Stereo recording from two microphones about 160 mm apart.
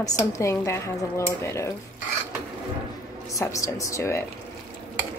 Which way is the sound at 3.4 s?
20° left (ahead or behind).